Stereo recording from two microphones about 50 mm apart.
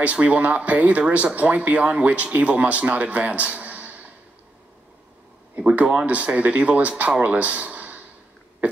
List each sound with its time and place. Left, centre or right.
0.0 s speech: right
5.6 s speech: centre
7.2 s a sound: right